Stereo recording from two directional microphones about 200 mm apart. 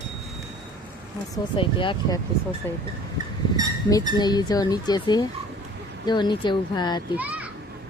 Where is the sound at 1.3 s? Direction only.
25° left (ahead or behind).